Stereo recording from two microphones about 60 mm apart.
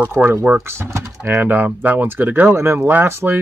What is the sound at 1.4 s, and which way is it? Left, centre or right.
Speech, right.